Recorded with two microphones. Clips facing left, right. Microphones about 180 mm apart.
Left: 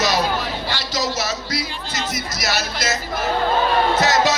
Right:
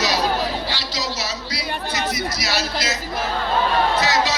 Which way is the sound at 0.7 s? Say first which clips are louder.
Left 3 dB; 50° left (ahead or behind).